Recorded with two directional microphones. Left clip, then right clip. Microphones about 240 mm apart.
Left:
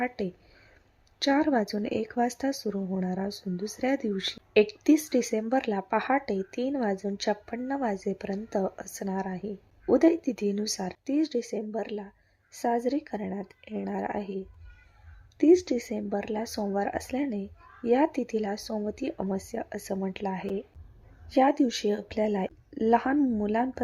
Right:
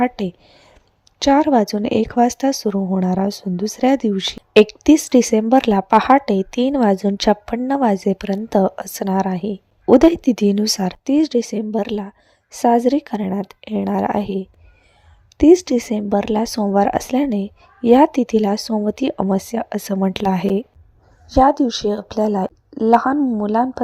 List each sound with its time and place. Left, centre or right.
0.0 s speech: right
21.2 s speech: right
21.6 s speech: centre
22.1 s speech: right